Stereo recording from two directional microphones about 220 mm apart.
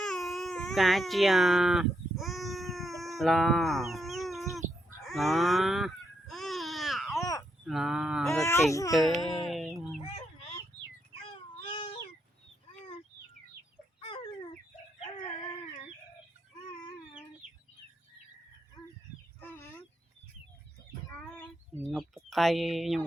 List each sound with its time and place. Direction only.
0.0 s baby cry: centre (ahead or behind)
5.0 s babbling: centre (ahead or behind)
7.7 s speech: centre (ahead or behind)
9.2 s a sound: 15° left (ahead or behind)
9.5 s fowl: centre (ahead or behind)
11.1 s child singing: 25° left (ahead or behind)
14.9 s dog: 25° left (ahead or behind)
19.4 s a sound: 10° left (ahead or behind)
21.8 s speech: centre (ahead or behind)